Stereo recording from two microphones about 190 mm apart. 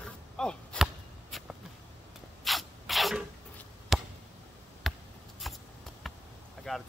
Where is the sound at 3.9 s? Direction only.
Centre (ahead or behind).